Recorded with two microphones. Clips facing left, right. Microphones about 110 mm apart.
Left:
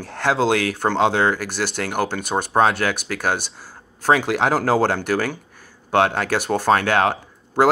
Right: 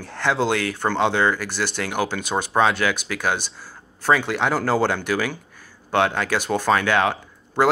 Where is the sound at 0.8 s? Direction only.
50° left (ahead or behind).